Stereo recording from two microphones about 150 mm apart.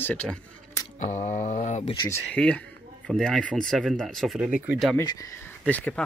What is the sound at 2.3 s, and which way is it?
Speech, 10° left (ahead or behind).